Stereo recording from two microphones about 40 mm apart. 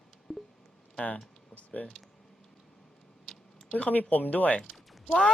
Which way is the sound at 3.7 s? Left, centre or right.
Left.